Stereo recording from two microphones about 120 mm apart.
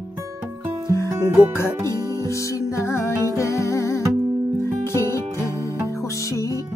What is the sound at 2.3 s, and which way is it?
Music, 25° left (ahead or behind).